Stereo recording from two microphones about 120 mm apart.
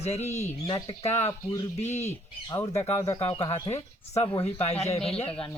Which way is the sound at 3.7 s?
65° left (ahead or behind).